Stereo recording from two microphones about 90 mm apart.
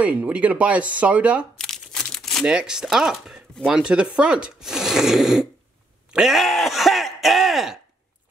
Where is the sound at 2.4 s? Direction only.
10° right (ahead or behind).